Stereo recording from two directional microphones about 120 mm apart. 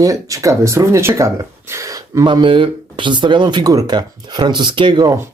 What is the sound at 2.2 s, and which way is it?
Speech, 40° right (ahead or behind).